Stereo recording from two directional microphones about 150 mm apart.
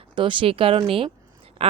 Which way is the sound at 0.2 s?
35° right (ahead or behind).